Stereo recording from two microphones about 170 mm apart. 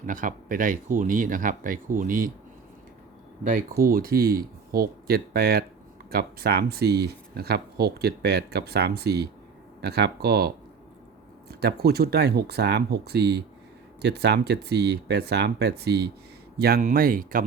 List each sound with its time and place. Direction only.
0.0 s speech: 50° right (ahead or behind)
3.4 s speech: 50° right (ahead or behind)
16.8 s speech: 55° right (ahead or behind)